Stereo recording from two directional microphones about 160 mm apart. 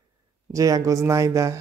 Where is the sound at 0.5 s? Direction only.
20° right (ahead or behind).